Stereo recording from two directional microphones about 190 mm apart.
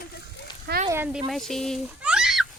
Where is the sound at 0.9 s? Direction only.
10° right (ahead or behind).